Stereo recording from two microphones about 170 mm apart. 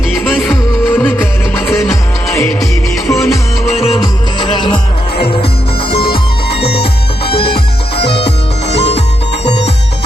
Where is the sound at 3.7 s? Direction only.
35° left (ahead or behind).